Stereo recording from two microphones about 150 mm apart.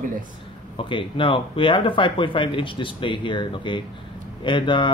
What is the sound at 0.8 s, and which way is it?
Speech, 35° left (ahead or behind).